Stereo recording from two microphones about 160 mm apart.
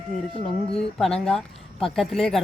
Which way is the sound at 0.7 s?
5° left (ahead or behind).